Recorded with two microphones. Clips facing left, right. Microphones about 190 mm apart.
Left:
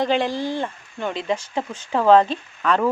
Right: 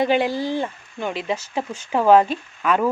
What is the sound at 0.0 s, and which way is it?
Speech, 10° right (ahead or behind).